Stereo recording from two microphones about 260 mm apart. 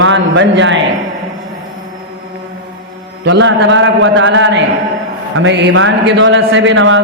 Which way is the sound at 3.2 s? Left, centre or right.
Right.